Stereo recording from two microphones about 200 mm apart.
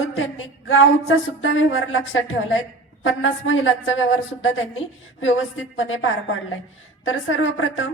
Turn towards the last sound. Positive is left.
turn(degrees=80)